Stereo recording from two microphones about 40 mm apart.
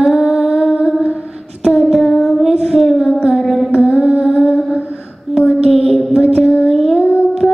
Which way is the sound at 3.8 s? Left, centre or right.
Right.